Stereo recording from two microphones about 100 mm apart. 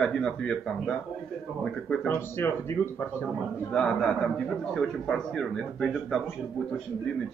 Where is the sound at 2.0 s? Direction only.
25° left (ahead or behind).